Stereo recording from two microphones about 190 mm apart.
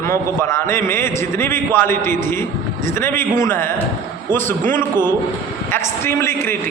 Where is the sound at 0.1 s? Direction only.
15° left (ahead or behind).